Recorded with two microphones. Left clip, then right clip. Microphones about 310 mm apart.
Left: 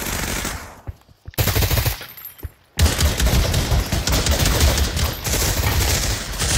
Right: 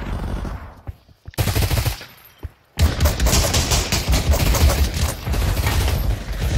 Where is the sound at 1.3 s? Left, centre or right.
Centre.